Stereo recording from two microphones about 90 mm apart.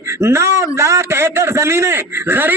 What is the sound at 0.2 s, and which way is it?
A man's voice, 30° right (ahead or behind).